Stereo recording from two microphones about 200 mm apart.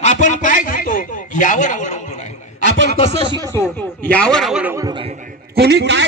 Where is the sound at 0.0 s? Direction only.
40° left (ahead or behind).